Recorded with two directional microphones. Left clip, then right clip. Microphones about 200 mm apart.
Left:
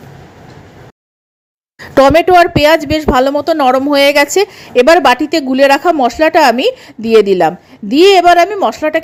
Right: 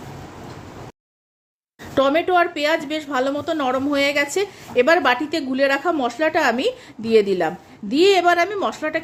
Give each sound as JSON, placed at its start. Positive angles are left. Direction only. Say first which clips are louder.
{"t": 2.0, "sound": "a woman's voice", "louder": "left 11 dB", "side_deg": 35}